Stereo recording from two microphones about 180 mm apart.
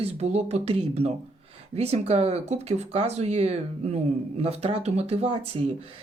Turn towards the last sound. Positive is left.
turn(degrees=-35)  # may be behind; listen again after turning